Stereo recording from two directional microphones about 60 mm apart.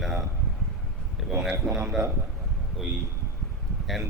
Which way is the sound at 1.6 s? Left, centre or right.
Right.